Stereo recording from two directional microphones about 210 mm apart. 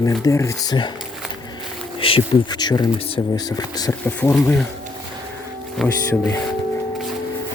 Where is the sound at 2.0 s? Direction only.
25° left (ahead or behind).